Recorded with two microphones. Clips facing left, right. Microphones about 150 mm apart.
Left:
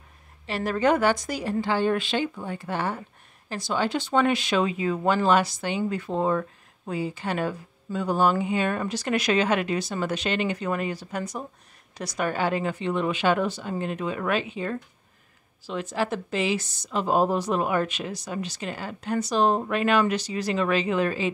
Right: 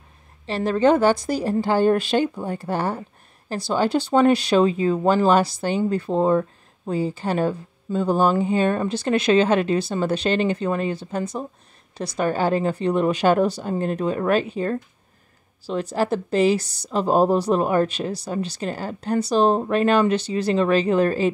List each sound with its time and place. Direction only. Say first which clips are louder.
0.5 s speech: right 5 dB; 30° right (ahead or behind)